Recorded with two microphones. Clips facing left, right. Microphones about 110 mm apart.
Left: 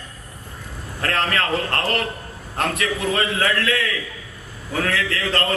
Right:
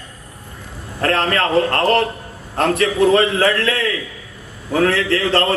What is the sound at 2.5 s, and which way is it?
A man's voice, 30° right (ahead or behind).